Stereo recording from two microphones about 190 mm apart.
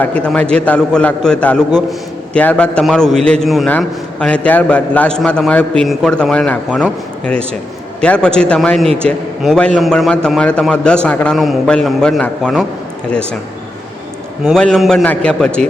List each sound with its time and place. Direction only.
0.0 s a man's voice: 5° left (ahead or behind)
14.4 s a man's voice: centre (ahead or behind)